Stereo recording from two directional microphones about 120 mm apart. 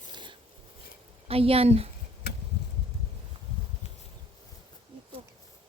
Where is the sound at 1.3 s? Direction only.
55° right (ahead or behind).